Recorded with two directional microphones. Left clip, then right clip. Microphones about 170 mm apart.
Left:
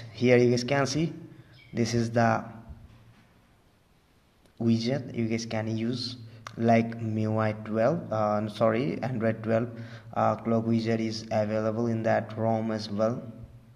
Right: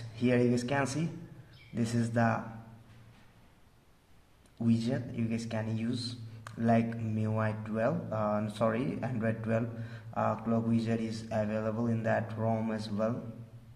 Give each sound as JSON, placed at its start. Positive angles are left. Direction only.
{"t": 0.1, "sound": "a man's voice", "side_deg": 30}
{"t": 4.6, "sound": "a man's voice", "side_deg": 25}